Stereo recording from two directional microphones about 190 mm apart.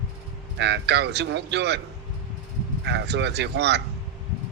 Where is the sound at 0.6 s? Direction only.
65° right (ahead or behind).